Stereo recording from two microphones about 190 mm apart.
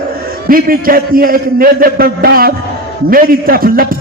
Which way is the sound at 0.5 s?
50° right (ahead or behind).